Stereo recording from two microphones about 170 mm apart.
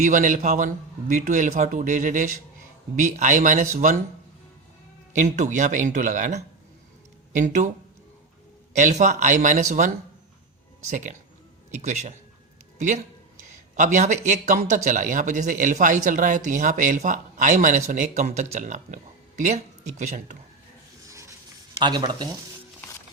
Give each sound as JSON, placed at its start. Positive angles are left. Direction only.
{"t": 0.0, "sound": "speech", "side_deg": -50}
{"t": 5.1, "sound": "speech", "side_deg": -45}
{"t": 8.7, "sound": "speech", "side_deg": -45}
{"t": 13.7, "sound": "speech", "side_deg": -45}
{"t": 21.1, "sound": "a sound", "side_deg": -20}
{"t": 21.8, "sound": "speech", "side_deg": -25}